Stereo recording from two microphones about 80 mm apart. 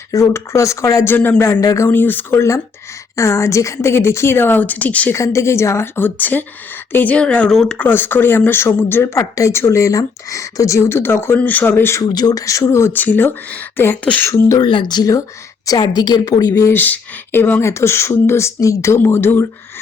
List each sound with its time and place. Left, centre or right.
0.1 s speech: left
1.0 s speech: left
1.9 s speech: left
3.2 s speech: left; by 5.1 s centre
5.1 s speech: left; by 7.8 s centre
7.8 s speech: left
11.9 s a woman's voice: left
12.9 s speech: left
14.3 s speech: left
14.6 s a woman's voice: left
16.7 s speech: left
17.6 s speech: left